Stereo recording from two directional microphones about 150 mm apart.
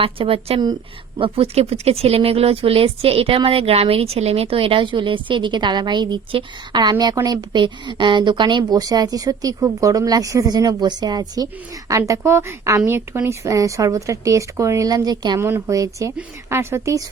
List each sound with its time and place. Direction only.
0.0 s speech: 40° right (ahead or behind)
15.4 s speech: 15° right (ahead or behind)